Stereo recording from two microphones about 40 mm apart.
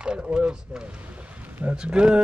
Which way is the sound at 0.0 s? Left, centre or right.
Right.